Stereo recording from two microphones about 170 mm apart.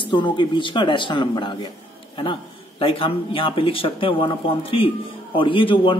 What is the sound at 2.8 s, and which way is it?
Speech, 30° left (ahead or behind).